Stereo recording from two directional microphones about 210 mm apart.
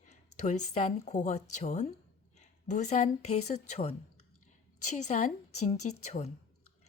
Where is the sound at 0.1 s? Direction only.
35° left (ahead or behind).